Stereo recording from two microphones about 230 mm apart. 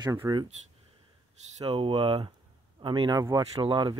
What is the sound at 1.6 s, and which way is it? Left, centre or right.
Speech, centre.